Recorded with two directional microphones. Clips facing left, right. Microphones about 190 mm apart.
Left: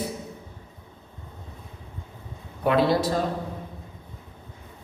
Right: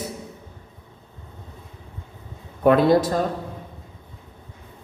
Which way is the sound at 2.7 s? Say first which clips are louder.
Right 5 dB; 50° right (ahead or behind).